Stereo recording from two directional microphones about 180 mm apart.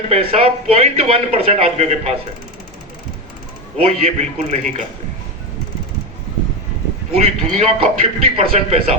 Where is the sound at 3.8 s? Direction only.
35° right (ahead or behind).